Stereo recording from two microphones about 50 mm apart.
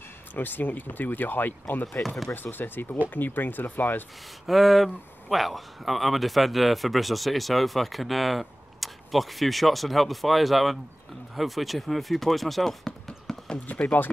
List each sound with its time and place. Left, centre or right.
0.3 s speech: left
4.5 s speech: centre
13.7 s speech: left